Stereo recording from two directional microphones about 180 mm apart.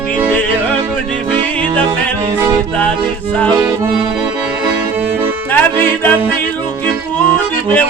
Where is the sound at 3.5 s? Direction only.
15° right (ahead or behind).